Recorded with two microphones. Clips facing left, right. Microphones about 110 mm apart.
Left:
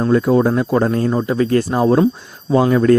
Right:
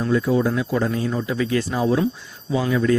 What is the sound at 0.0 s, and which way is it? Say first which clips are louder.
Speech: left 6 dB; 55° left (ahead or behind).